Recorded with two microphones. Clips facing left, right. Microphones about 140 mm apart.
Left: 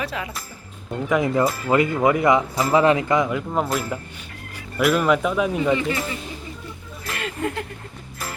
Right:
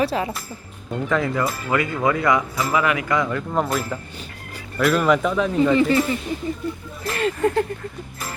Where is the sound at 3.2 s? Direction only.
10° left (ahead or behind).